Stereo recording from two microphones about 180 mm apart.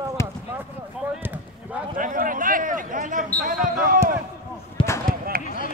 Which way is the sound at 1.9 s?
50° right (ahead or behind).